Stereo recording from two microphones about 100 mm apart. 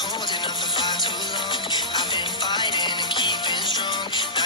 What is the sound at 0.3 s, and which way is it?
Music, 50° left (ahead or behind).